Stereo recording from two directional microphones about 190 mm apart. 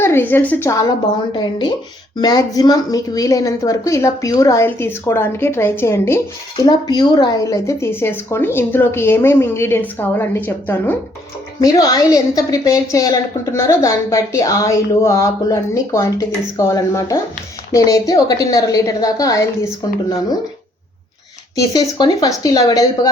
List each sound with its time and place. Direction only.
0.0 s a woman's voice: 10° left (ahead or behind)
21.5 s a woman's voice: 20° left (ahead or behind)